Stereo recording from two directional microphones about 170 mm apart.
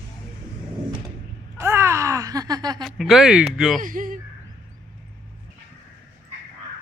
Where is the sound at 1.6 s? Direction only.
15° right (ahead or behind).